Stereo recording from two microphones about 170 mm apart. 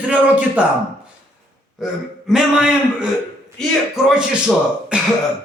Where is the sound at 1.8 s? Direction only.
5° right (ahead or behind).